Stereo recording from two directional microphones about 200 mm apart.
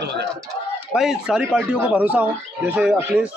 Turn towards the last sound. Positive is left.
turn(degrees=-5)  # may be behind; listen again after turning